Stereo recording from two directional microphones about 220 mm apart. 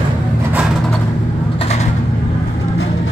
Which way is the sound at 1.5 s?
30° left (ahead or behind).